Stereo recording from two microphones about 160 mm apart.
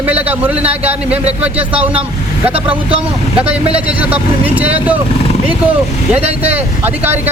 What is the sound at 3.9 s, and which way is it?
Speech, 10° right (ahead or behind).